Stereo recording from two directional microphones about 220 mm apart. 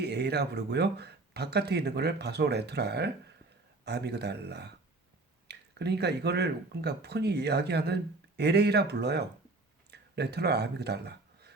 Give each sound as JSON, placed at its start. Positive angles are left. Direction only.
{"t": 0.0, "sound": "speech", "side_deg": -50}